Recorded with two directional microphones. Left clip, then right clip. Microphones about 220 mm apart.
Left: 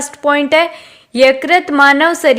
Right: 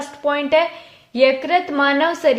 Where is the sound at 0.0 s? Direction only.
45° left (ahead or behind).